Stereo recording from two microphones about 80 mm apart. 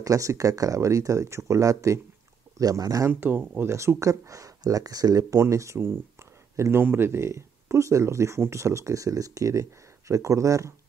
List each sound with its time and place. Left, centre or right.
0.0 s speech: right
3.1 s speech: right